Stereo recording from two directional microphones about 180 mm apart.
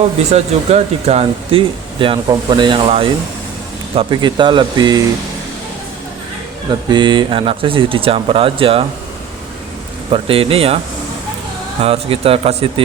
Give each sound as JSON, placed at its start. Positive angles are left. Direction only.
{"t": 0.3, "sound": "speech", "side_deg": -35}
{"t": 6.8, "sound": "speech", "side_deg": -25}
{"t": 10.1, "sound": "speech", "side_deg": -30}
{"t": 11.8, "sound": "speech", "side_deg": -30}